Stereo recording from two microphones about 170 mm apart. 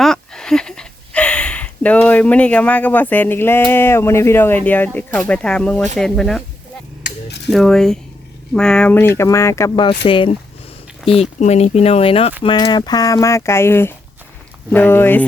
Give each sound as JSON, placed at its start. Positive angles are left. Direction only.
{"t": 0.0, "sound": "speech", "side_deg": 5}
{"t": 7.5, "sound": "speech", "side_deg": 0}